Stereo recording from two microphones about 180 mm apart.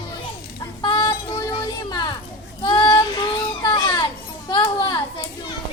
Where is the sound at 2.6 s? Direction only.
25° left (ahead or behind).